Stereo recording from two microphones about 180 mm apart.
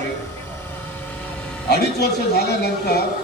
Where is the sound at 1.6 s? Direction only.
65° left (ahead or behind).